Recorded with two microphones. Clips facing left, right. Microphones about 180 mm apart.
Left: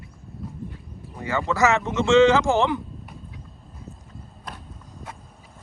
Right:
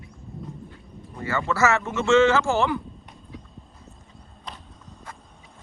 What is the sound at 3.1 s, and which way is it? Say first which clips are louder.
Horse: left 1 dB; centre (ahead or behind).